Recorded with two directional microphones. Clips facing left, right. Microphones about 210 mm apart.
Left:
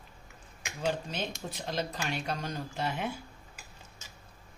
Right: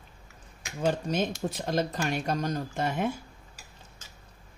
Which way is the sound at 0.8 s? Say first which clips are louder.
Right 6 dB; 45° right (ahead or behind).